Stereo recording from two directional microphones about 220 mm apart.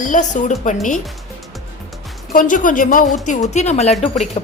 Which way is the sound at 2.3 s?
35° left (ahead or behind).